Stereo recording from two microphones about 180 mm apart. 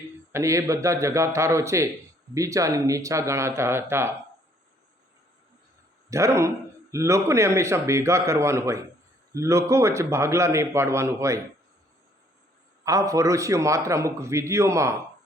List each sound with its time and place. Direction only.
0.3 s a man's voice: 15° right (ahead or behind)
6.1 s a man's voice: 15° right (ahead or behind)
12.8 s a man's voice: 20° right (ahead or behind)